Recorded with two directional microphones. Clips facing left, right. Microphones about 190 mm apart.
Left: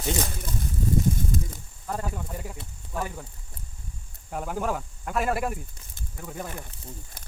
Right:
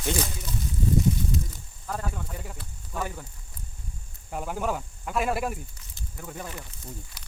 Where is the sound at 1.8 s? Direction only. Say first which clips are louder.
Left 1 dB; 10° left (ahead or behind).